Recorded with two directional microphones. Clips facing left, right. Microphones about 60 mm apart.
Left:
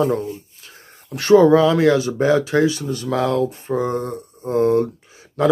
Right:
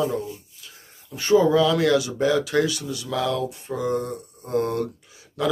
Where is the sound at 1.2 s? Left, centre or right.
Left.